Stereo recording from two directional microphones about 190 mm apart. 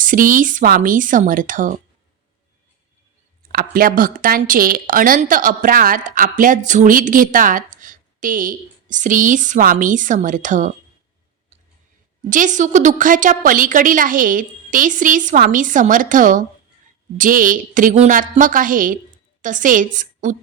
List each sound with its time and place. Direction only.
0.0 s a woman's voice: 45° right (ahead or behind)
3.5 s a woman's voice: 50° right (ahead or behind)
12.3 s a woman's voice: 40° right (ahead or behind)